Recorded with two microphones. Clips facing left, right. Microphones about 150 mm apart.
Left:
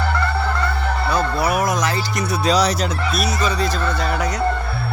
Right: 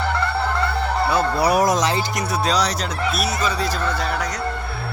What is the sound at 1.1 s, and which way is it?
Fowl, 35° right (ahead or behind).